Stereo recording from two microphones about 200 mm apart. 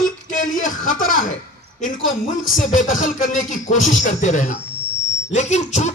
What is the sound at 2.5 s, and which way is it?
A man's voice, 40° left (ahead or behind).